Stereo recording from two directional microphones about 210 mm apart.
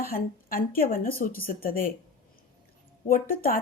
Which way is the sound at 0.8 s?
45° left (ahead or behind).